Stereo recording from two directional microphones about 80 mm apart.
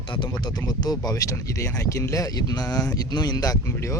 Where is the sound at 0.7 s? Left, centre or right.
Left.